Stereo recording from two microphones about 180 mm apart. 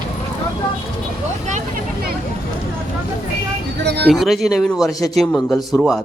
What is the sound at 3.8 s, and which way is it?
Music, 65° right (ahead or behind).